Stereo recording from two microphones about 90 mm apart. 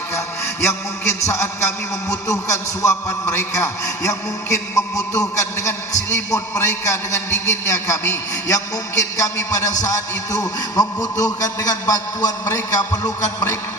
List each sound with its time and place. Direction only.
0.6 s a man's voice: 30° left (ahead or behind)